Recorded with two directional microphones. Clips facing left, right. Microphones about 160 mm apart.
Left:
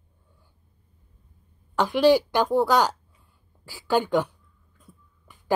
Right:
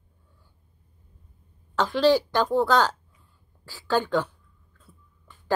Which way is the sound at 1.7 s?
15° left (ahead or behind).